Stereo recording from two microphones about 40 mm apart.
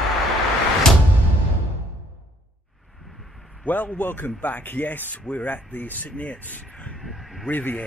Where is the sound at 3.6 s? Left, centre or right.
Left.